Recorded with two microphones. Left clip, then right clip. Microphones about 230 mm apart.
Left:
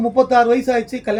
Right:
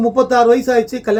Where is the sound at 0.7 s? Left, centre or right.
Centre.